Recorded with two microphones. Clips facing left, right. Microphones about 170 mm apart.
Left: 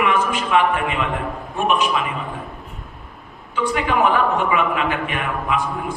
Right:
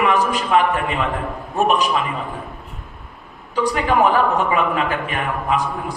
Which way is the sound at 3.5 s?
40° right (ahead or behind).